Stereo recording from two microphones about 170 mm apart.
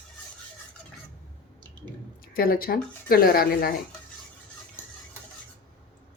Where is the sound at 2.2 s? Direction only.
60° left (ahead or behind).